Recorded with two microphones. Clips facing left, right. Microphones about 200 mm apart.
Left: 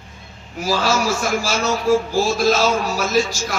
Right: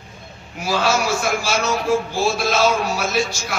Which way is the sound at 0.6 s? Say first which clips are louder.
Even; 40° left (ahead or behind).